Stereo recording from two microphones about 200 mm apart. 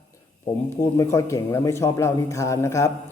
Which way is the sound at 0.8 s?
15° left (ahead or behind).